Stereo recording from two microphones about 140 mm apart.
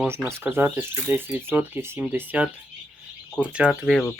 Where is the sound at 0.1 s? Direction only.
15° right (ahead or behind).